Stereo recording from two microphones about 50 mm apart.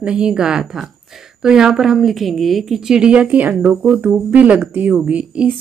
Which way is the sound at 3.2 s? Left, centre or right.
Right.